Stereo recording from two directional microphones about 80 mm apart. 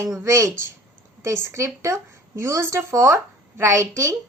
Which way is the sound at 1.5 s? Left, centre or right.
Right.